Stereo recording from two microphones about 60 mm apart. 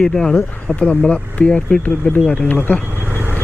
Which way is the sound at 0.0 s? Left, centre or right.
Centre.